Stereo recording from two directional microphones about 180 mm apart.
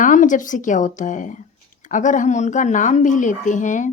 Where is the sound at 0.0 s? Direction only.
45° left (ahead or behind).